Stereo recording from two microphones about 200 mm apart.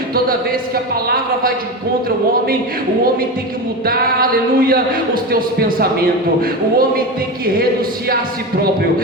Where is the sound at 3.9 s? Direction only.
45° right (ahead or behind).